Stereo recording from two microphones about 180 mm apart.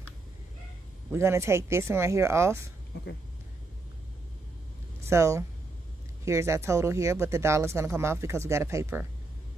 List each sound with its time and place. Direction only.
1.1 s speech: 15° right (ahead or behind)
5.0 s speech: 15° right (ahead or behind)